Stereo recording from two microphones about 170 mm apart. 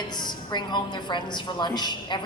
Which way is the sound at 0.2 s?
25° left (ahead or behind).